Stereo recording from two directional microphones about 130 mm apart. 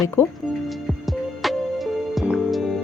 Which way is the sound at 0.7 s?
Centre (ahead or behind).